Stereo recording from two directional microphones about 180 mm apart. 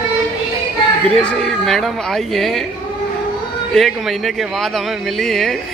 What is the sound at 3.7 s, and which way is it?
Speech, centre (ahead or behind).